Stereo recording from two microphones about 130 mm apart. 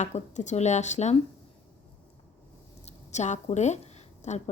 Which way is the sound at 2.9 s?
60° left (ahead or behind).